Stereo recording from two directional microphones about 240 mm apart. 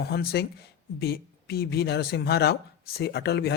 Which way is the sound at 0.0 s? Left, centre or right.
Left.